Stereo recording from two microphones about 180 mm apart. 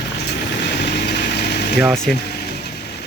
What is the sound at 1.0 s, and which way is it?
Engine, 65° left (ahead or behind).